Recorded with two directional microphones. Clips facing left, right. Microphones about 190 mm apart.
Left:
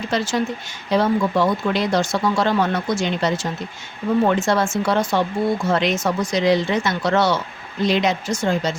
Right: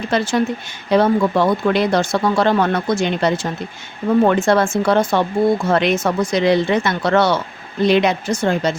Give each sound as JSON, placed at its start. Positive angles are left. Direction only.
{"t": 0.1, "sound": "speech", "side_deg": -60}